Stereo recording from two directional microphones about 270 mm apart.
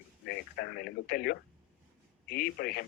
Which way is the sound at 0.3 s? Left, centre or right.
Left.